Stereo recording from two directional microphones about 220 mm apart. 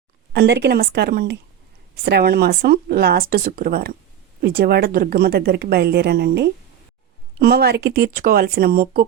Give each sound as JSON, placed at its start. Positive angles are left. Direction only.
{"t": 0.3, "sound": "speech", "side_deg": -50}